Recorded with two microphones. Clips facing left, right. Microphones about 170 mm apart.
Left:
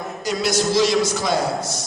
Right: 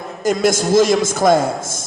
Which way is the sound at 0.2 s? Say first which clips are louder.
Right 6 dB; 50° right (ahead or behind).